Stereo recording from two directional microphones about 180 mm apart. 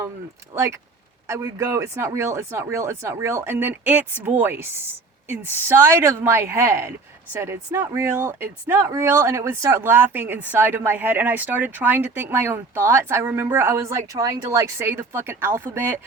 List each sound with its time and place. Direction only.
0.5 s speech: 15° right (ahead or behind)